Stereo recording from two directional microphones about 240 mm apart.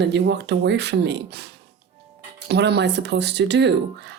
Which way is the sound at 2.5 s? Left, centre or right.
Right.